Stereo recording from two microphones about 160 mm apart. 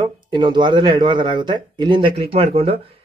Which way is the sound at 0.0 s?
30° right (ahead or behind).